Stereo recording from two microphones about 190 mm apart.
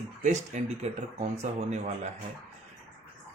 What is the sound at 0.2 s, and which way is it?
Speech, 40° right (ahead or behind).